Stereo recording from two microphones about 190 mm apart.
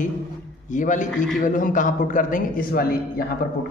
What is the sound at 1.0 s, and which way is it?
Speech, centre (ahead or behind).